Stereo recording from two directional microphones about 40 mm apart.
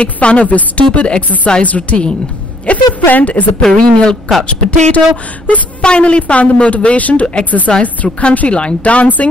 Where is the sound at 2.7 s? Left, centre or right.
Left.